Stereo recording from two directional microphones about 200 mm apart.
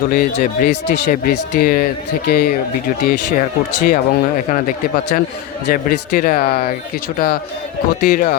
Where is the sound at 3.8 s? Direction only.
40° left (ahead or behind).